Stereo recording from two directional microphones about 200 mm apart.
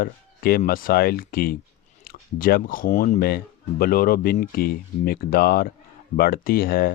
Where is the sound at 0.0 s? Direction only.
50° left (ahead or behind).